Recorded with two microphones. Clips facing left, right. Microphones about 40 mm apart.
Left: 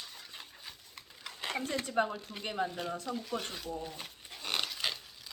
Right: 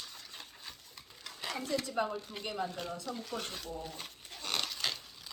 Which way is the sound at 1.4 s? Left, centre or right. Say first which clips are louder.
Even; left.